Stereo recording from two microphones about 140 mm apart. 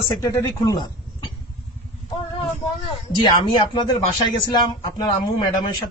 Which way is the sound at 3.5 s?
30° left (ahead or behind).